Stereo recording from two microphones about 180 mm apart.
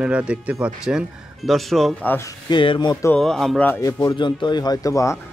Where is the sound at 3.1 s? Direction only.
Centre (ahead or behind).